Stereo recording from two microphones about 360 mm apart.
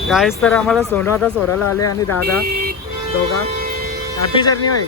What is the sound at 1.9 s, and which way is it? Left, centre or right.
Speech, left.